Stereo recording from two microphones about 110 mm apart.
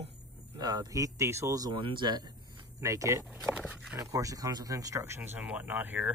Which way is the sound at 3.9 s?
30° right (ahead or behind).